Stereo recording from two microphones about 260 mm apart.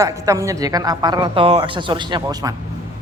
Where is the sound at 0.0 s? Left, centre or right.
Centre.